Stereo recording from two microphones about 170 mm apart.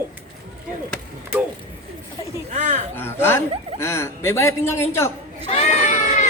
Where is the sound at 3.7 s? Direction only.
15° left (ahead or behind).